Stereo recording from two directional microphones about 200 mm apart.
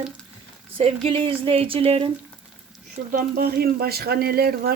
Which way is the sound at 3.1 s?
50° right (ahead or behind).